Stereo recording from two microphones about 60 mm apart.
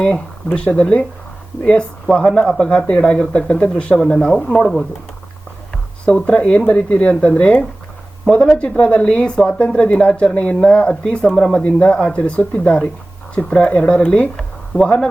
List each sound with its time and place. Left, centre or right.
0.5 s a woman's voice: left
5.7 s a woman's voice: centre